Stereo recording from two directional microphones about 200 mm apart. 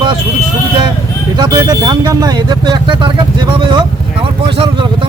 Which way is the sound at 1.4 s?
20° right (ahead or behind).